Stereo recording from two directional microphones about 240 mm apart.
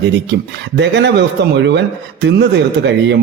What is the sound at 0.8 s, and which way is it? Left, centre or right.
Speech, right.